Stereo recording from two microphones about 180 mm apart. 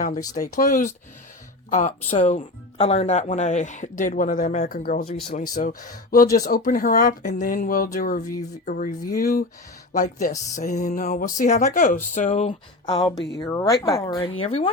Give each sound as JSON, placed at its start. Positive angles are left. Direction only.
{"t": 0.2, "sound": "speech", "side_deg": 20}
{"t": 0.5, "sound": "speech", "side_deg": 40}
{"t": 5.0, "sound": "speech", "side_deg": 30}
{"t": 5.5, "sound": "speech", "side_deg": 50}
{"t": 9.0, "sound": "speech", "side_deg": 20}
{"t": 9.9, "sound": "speech", "side_deg": 45}
{"t": 12.8, "sound": "speech", "side_deg": 30}
{"t": 13.4, "sound": "speech", "side_deg": 20}
{"t": 14.4, "sound": "speech", "side_deg": 35}